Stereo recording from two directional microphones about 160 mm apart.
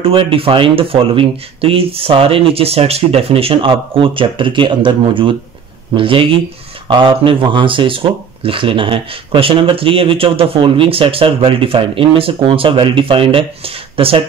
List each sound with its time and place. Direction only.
0.0 s speech: 35° right (ahead or behind)